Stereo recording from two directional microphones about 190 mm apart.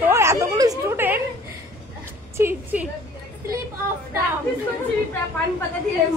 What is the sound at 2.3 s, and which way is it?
Speech, 10° right (ahead or behind).